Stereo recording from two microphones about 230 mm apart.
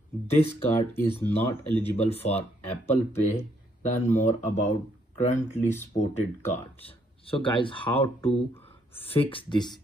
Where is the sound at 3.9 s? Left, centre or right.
Left.